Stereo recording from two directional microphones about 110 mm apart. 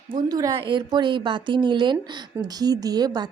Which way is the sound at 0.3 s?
35° right (ahead or behind).